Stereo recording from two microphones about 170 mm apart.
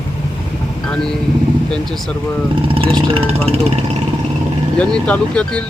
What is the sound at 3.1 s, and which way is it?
Speech, 35° right (ahead or behind).